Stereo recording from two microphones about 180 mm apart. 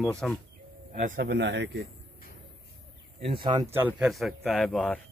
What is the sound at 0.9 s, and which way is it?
Speech, 45° right (ahead or behind).